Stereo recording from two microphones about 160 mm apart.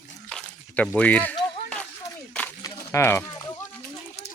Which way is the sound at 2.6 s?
20° left (ahead or behind).